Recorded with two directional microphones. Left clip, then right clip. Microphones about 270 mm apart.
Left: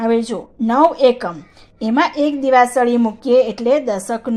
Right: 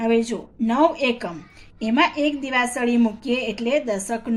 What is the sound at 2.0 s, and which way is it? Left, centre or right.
Speech, centre.